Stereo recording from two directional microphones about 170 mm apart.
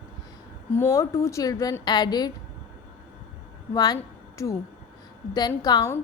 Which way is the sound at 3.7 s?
20° left (ahead or behind).